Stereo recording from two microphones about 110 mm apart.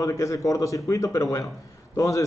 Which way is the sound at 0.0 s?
30° left (ahead or behind).